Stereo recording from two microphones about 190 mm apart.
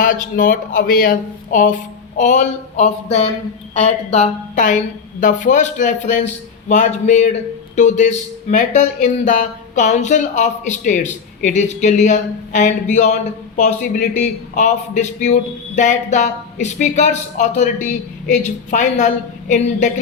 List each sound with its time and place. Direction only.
0.0 s a man's voice: 45° left (ahead or behind)